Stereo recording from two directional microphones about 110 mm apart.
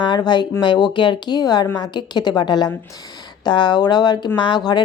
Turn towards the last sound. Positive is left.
turn(degrees=45)  # may be behind; listen again after turning